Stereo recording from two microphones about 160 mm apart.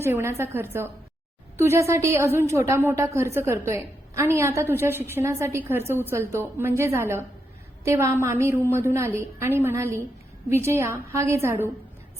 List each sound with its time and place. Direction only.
0.0 s a woman's voice: 15° right (ahead or behind)